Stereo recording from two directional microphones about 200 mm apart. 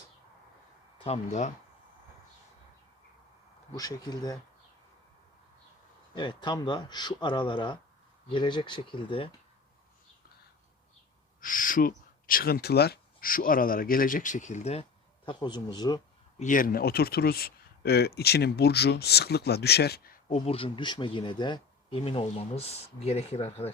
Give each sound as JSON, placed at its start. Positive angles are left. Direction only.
{"t": 0.9, "sound": "speech", "side_deg": 30}
{"t": 3.8, "sound": "speech", "side_deg": 20}
{"t": 6.1, "sound": "speech", "side_deg": 25}
{"t": 11.3, "sound": "speech", "side_deg": 45}
{"t": 15.3, "sound": "speech", "side_deg": 20}
{"t": 16.4, "sound": "speech", "side_deg": 40}
{"t": 20.3, "sound": "speech", "side_deg": 30}